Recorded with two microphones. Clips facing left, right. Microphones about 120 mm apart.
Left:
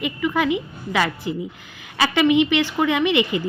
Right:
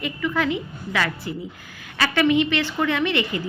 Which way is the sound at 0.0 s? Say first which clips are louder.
Left 2 dB; 15° left (ahead or behind).